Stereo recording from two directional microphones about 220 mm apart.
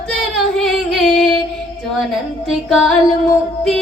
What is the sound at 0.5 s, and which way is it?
Music, centre (ahead or behind).